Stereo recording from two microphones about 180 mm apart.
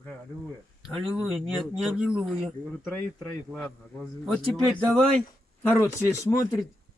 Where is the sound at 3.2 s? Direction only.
5° left (ahead or behind).